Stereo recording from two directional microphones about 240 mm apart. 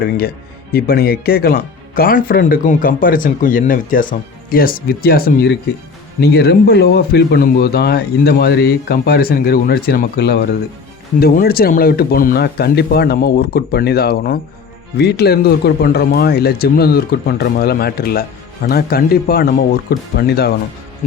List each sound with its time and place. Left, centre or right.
0.7 s speech: left